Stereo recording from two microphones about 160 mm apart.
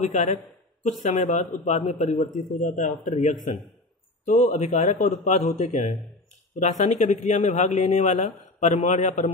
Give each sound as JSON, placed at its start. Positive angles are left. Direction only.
{"t": 0.0, "sound": "a man's voice", "side_deg": 50}